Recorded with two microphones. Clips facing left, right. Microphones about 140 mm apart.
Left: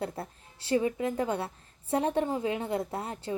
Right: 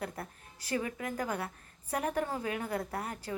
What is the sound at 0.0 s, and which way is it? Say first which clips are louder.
A woman's voice: left 5 dB; 25° left (ahead or behind).